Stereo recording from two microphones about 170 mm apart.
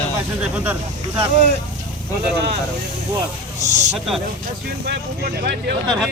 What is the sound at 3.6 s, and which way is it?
Speech, 90° right.